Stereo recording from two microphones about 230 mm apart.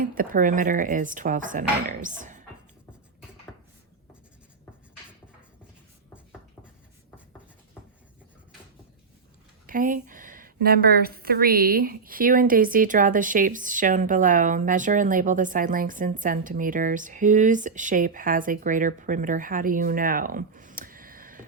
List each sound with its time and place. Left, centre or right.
0.0 s a woman's voice: right
9.6 s a woman's voice: right